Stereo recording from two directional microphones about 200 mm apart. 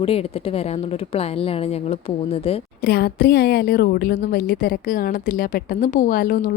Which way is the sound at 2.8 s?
50° left (ahead or behind).